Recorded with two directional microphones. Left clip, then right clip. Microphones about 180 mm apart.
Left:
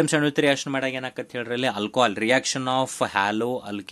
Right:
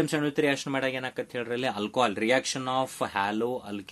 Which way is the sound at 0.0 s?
35° left (ahead or behind).